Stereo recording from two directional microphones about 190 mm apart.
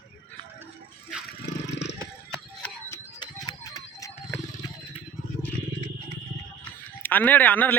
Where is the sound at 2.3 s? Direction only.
10° left (ahead or behind).